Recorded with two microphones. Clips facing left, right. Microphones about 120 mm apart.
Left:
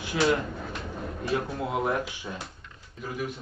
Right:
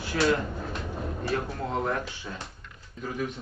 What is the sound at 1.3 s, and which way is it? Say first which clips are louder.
Speech: left 2 dB; 10° left (ahead or behind).